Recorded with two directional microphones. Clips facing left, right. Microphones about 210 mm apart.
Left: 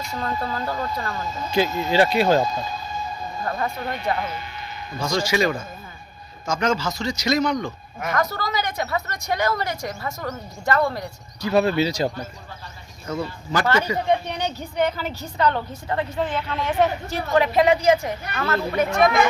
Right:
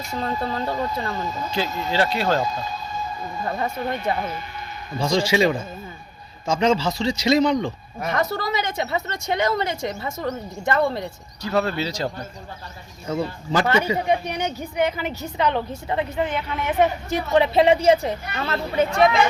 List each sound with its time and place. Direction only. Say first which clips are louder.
0.2 s speech: right 2 dB; 20° right (ahead or behind)
1.5 s speech: left 5 dB; 15° left (ahead or behind)
4.9 s speech: right 3 dB; 30° right (ahead or behind)
11.4 s speech: left 4 dB; 15° left (ahead or behind)
13.1 s speech: right 3 dB; 20° right (ahead or behind)
17.3 s speech: right 1 dB; 25° right (ahead or behind)